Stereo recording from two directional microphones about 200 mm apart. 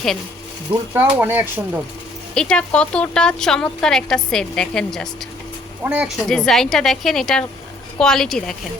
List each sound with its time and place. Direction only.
0.7 s speech: 30° right (ahead or behind)
1.2 s speech: 10° right (ahead or behind)
2.3 s speech: 5° left (ahead or behind)